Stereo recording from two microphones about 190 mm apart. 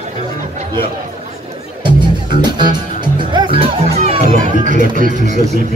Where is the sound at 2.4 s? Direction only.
25° right (ahead or behind); by 5.4 s 40° right (ahead or behind).